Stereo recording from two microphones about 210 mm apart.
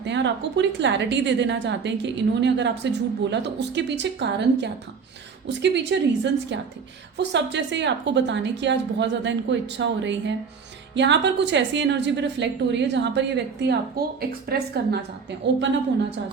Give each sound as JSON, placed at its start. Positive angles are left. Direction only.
{"t": 0.0, "sound": "a woman's voice", "side_deg": -60}